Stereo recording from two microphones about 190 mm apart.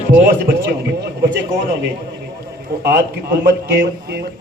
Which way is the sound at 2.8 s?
60° right (ahead or behind).